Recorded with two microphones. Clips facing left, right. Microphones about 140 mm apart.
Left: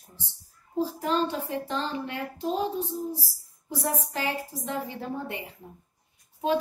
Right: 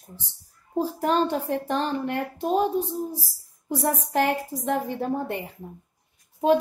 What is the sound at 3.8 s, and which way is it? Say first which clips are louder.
A child's voice: right 6 dB; 60° right (ahead or behind).